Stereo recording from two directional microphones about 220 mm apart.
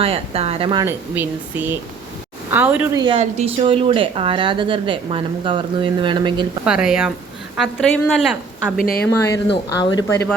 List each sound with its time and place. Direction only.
0.0 s a woman's voice: 25° right (ahead or behind)
0.9 s speech: 10° right (ahead or behind)
3.0 s a woman's voice: 25° right (ahead or behind)
6.7 s a woman's voice: 5° right (ahead or behind)
9.0 s speech: 10° left (ahead or behind)